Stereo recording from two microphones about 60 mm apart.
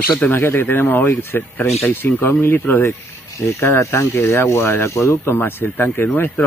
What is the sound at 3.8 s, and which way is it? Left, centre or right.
Speech, left.